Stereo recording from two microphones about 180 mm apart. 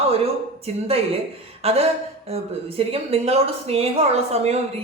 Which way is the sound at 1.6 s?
35° right (ahead or behind).